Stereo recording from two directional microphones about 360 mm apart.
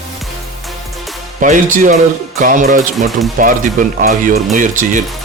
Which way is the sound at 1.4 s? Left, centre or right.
Right.